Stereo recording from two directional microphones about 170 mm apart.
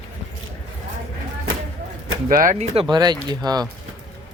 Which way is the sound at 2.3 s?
50° right (ahead or behind).